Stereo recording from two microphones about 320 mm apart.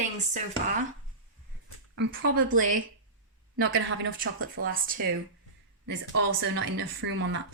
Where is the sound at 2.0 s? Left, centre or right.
Right.